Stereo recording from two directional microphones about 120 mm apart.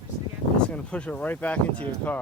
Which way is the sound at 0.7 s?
10° left (ahead or behind).